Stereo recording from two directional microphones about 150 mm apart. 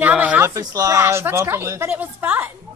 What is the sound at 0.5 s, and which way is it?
A woman's voice, 20° right (ahead or behind).